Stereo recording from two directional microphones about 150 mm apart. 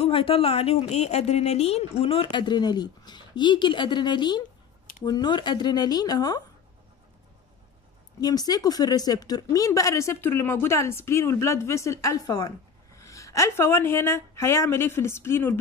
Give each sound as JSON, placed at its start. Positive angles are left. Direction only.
{"t": 0.0, "sound": "speech", "side_deg": 35}
{"t": 8.2, "sound": "speech", "side_deg": 25}